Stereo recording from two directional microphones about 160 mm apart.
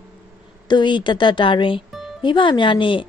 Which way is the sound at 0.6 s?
30° left (ahead or behind).